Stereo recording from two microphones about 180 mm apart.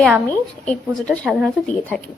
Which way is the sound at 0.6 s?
5° left (ahead or behind).